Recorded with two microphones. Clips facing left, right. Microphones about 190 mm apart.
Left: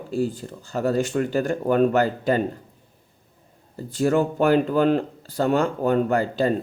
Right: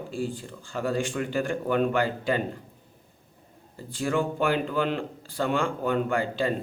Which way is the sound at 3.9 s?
40° left (ahead or behind).